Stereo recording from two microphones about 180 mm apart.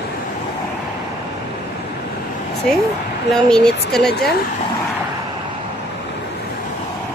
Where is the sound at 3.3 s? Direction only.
5° left (ahead or behind).